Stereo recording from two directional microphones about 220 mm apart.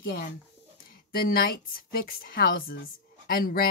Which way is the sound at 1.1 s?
40° left (ahead or behind).